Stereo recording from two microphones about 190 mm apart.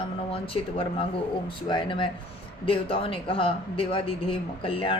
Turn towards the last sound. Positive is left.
turn(degrees=30)  # may be behind; listen again after turning